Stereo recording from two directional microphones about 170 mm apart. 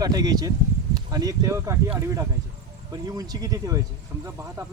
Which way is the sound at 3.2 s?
20° right (ahead or behind).